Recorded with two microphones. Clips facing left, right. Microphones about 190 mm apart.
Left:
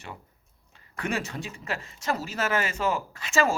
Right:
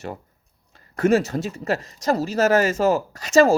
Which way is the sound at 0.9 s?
40° right (ahead or behind).